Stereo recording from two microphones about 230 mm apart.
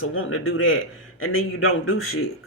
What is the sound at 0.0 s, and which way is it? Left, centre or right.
Speech, left.